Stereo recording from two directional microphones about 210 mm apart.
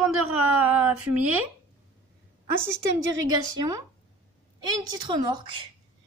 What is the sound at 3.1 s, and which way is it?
Speech, 80° right.